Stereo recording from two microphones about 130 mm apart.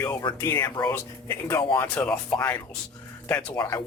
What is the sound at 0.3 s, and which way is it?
Speech, 25° left (ahead or behind).